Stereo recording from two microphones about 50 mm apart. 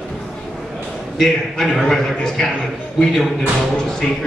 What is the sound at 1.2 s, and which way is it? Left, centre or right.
Speech, centre.